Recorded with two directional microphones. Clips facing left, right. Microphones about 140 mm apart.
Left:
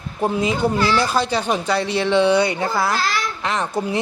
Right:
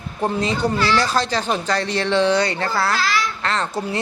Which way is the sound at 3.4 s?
15° left (ahead or behind).